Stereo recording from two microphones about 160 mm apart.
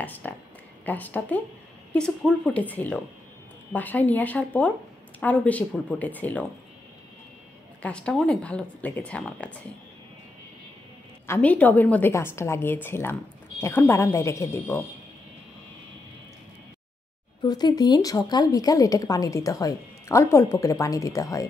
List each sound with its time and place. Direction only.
0.0 s a sound: 10° left (ahead or behind)
0.8 s speech: 10° left (ahead or behind)
7.8 s speech: 5° left (ahead or behind)
11.2 s speech: 10° left (ahead or behind)
17.4 s a woman's voice: 25° left (ahead or behind)